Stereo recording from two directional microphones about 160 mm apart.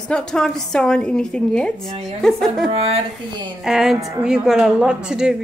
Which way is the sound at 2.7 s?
40° right (ahead or behind).